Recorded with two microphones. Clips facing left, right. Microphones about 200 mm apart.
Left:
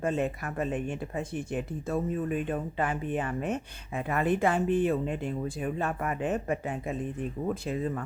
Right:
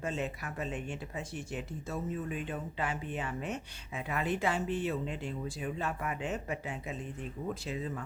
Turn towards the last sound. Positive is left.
turn(degrees=50)  # may be behind; listen again after turning